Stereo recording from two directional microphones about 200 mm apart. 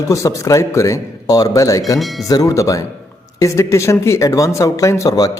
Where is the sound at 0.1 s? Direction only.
15° left (ahead or behind).